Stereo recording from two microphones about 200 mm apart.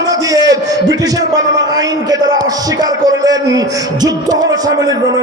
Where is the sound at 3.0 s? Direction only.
20° right (ahead or behind).